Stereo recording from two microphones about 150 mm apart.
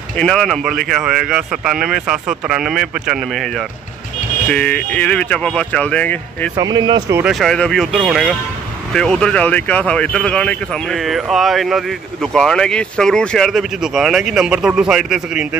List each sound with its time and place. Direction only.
0.2 s speech: 5° left (ahead or behind)
4.5 s speech: 10° left (ahead or behind)
6.5 s speech: 30° right (ahead or behind)
7.2 s speech: centre (ahead or behind)